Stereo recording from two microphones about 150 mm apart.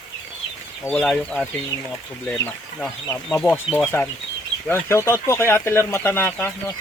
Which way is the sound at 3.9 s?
20° left (ahead or behind).